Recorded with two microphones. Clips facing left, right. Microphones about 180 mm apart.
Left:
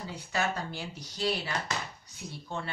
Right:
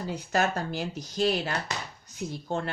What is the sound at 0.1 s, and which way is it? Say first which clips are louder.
Speech: right 5 dB; 45° right (ahead or behind).